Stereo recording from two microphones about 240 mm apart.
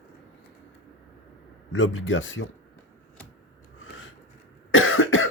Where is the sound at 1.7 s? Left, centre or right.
Left.